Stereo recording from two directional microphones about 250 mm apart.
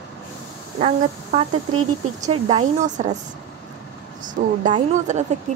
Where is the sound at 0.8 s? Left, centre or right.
Right.